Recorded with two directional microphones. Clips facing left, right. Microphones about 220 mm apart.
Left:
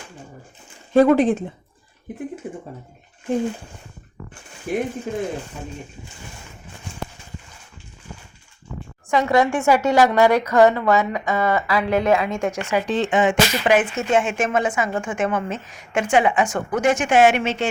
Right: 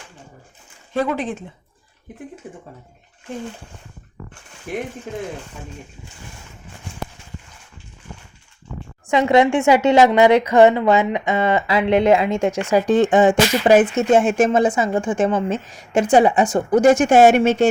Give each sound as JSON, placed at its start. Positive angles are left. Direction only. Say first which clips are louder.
{"t": 0.9, "sound": "speech", "louder": "left 8 dB", "side_deg": 40}
{"t": 4.7, "sound": "speech", "louder": "left 3 dB", "side_deg": 5}
{"t": 9.0, "sound": "speech", "louder": "right 3 dB", "side_deg": -20}
{"t": 12.9, "sound": "a sound", "louder": "right 6 dB", "side_deg": -45}
{"t": 13.2, "sound": "a woman's voice", "louder": "right 4 dB", "side_deg": -40}